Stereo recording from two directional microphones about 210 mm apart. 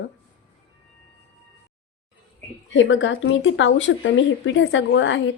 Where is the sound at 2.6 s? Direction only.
60° left (ahead or behind).